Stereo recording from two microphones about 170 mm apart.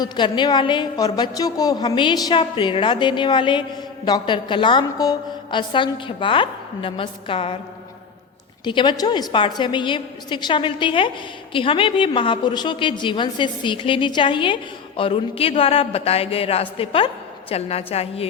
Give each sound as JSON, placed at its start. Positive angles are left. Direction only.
{"t": 0.0, "sound": "a woman's voice", "side_deg": 25}
{"t": 8.6, "sound": "a woman's voice", "side_deg": 30}